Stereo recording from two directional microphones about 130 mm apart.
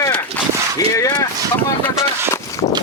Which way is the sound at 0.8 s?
25° left (ahead or behind).